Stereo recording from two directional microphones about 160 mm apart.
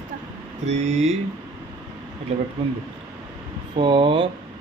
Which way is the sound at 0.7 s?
45° right (ahead or behind).